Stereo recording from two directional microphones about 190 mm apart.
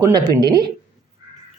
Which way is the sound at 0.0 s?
20° right (ahead or behind).